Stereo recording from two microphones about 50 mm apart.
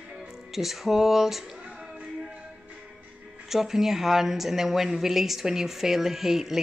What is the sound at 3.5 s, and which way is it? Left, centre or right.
Speech, centre.